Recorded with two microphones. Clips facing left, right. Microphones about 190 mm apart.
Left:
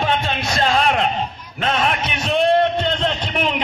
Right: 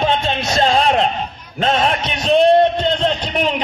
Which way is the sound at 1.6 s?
30° right (ahead or behind).